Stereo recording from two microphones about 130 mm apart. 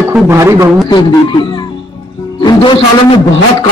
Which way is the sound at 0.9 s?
35° left (ahead or behind).